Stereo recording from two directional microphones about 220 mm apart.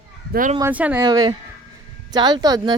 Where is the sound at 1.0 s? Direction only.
20° right (ahead or behind).